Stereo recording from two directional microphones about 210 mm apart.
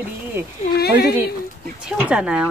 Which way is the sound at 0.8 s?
50° left (ahead or behind).